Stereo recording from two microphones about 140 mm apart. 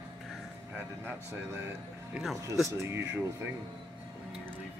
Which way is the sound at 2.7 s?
20° right (ahead or behind).